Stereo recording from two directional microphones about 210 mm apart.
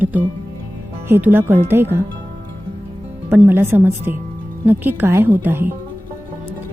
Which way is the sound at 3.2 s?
10° right (ahead or behind).